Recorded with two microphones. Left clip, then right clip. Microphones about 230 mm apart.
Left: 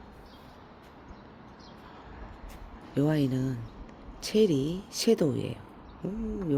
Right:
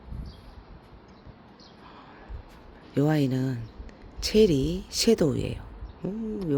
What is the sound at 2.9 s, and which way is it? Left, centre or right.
Speech, centre.